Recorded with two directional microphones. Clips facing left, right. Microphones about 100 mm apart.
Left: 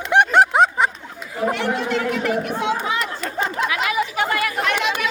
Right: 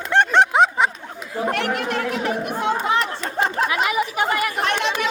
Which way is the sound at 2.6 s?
40° right (ahead or behind).